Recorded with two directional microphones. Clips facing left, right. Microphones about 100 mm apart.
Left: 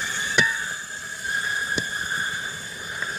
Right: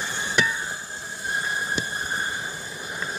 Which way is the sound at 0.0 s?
20° right (ahead or behind).